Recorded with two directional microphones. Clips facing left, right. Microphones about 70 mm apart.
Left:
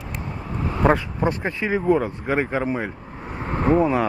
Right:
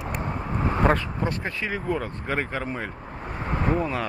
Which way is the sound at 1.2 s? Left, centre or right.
Left.